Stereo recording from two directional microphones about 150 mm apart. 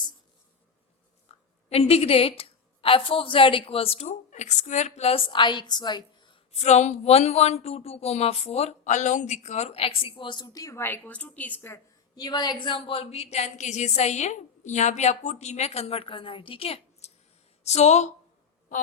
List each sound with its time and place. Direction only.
1.3 s a woman's voice: 45° left (ahead or behind); by 11.8 s 15° left (ahead or behind)
12.1 s a woman's voice: 25° left (ahead or behind); by 18.1 s 45° left (ahead or behind)